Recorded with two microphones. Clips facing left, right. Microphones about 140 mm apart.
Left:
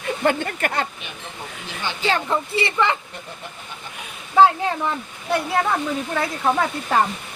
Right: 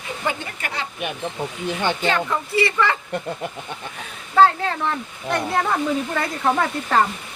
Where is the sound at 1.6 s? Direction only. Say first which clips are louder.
Right 7 dB; 55° right (ahead or behind).